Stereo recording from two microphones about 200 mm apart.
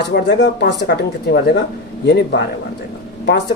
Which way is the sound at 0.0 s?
60° left (ahead or behind).